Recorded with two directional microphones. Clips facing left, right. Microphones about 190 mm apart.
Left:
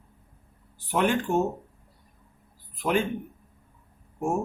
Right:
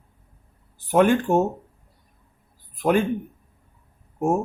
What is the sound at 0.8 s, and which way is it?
Speech, 50° right (ahead or behind).